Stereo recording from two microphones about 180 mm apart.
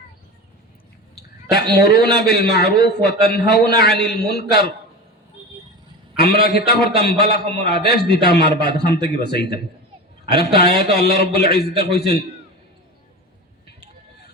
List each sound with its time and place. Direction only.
1.1 s a man's voice: 65° left (ahead or behind)
6.1 s a man's voice: 60° left (ahead or behind)